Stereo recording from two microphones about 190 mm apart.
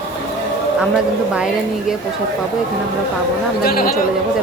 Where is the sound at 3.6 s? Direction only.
55° left (ahead or behind).